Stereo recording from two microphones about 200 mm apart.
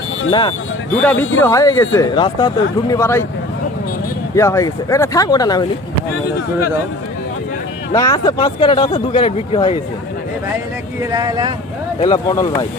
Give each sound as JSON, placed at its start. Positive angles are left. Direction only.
{"t": 0.3, "sound": "speech", "side_deg": 25}
{"t": 1.0, "sound": "speech", "side_deg": 10}
{"t": 4.4, "sound": "speech", "side_deg": 15}
{"t": 7.9, "sound": "speech", "side_deg": 15}
{"t": 11.0, "sound": "speech", "side_deg": -20}
{"t": 12.0, "sound": "speech", "side_deg": 20}